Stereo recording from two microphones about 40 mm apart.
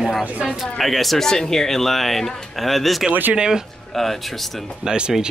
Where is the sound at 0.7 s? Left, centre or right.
Centre.